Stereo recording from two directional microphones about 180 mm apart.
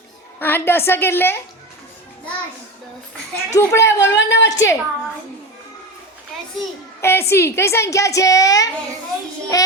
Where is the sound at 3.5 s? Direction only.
15° left (ahead or behind).